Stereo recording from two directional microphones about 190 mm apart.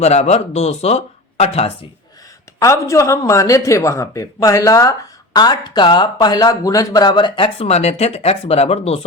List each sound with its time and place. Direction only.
0.0 s speech: 35° left (ahead or behind)
2.6 s speech: 15° left (ahead or behind); by 9.0 s 30° left (ahead or behind)